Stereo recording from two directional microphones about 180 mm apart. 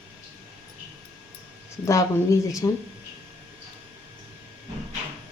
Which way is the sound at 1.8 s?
15° left (ahead or behind).